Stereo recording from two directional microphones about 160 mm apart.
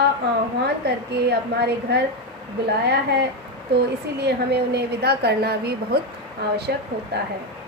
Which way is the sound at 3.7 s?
90° right.